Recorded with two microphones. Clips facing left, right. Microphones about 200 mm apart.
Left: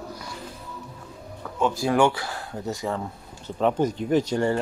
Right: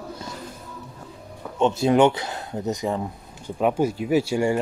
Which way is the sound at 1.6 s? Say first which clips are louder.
Right 3 dB; 25° right (ahead or behind).